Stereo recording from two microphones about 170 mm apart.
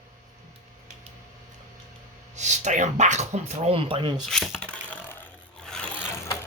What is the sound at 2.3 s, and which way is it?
Speech, 45° right (ahead or behind).